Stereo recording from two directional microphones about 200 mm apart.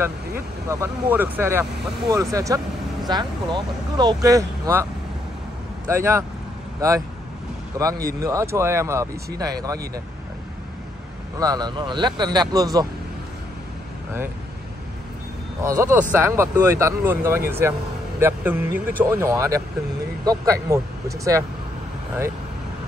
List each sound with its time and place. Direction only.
0.7 s speech: 10° right (ahead or behind)
5.9 s speech: 15° right (ahead or behind)
7.8 s speech: 15° right (ahead or behind)
11.3 s speech: 20° right (ahead or behind)
15.8 s speech: 10° right (ahead or behind)